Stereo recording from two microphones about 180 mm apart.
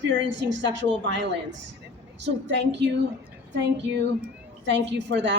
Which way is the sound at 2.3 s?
75° right (ahead or behind).